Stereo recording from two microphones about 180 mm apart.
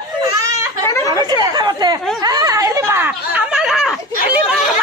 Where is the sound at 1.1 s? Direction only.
20° right (ahead or behind).